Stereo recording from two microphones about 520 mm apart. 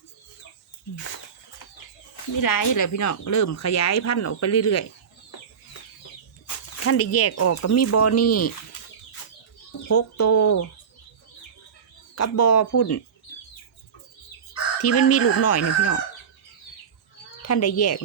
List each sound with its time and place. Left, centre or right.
2.3 s speech: left
6.8 s speech: left
9.9 s speech: left
12.1 s speech: left
14.8 s speech: left
17.4 s speech: left